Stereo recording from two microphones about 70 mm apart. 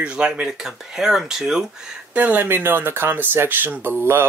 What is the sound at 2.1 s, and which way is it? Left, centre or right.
Speech, right.